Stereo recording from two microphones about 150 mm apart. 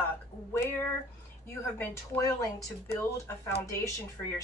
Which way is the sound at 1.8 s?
20° left (ahead or behind).